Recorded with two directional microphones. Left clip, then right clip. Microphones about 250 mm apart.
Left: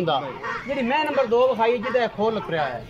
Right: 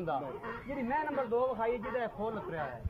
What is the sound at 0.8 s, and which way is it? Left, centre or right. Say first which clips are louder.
Speech: left 11 dB; centre.